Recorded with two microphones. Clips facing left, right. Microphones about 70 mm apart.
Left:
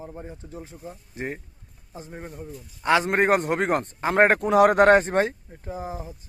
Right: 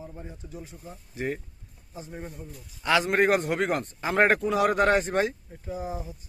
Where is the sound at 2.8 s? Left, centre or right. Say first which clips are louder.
Left 2 dB; left.